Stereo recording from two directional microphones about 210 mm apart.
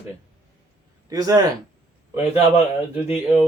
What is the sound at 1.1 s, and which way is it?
Speech, 15° right (ahead or behind).